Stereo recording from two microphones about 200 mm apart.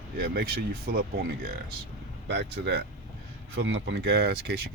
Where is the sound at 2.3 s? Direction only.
55° right (ahead or behind).